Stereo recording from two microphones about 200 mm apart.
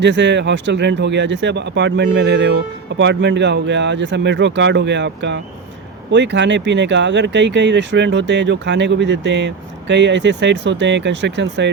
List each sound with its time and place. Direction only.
0.0 s speech: 60° right (ahead or behind)